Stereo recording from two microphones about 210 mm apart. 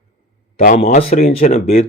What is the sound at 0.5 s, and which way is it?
Speech, 35° left (ahead or behind).